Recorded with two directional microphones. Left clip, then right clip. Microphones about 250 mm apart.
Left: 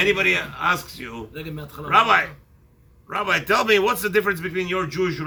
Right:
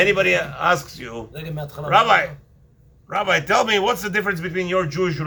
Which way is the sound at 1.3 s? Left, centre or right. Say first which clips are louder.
Right 2 dB; right.